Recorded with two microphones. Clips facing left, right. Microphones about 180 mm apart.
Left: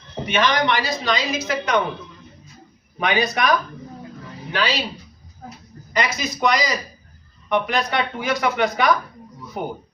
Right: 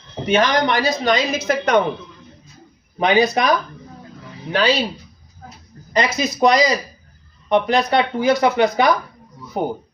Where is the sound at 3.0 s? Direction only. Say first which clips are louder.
Right 6 dB; 30° right (ahead or behind).